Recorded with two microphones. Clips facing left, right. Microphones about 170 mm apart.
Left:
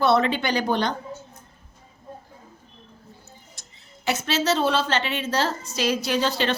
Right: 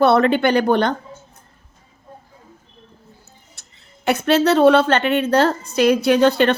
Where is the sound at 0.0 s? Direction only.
60° right (ahead or behind).